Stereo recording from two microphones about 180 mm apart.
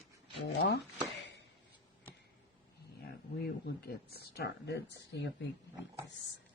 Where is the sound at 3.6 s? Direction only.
60° left (ahead or behind).